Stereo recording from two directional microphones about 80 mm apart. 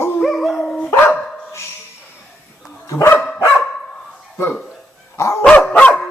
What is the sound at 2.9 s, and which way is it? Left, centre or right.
Dog, left.